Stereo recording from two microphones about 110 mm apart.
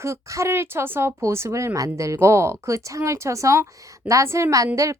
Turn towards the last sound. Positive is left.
turn(degrees=-30)  # may be behind; listen again after turning